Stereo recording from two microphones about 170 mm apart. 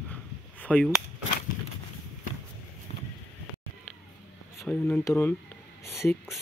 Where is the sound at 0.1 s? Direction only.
10° left (ahead or behind).